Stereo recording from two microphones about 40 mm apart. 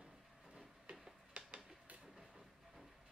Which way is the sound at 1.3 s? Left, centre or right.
Right.